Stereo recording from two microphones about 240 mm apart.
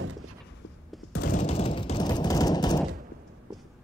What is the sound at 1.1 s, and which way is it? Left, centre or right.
Gunshot, left.